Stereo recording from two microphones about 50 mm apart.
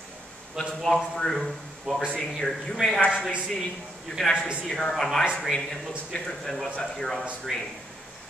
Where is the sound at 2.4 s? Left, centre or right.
Centre.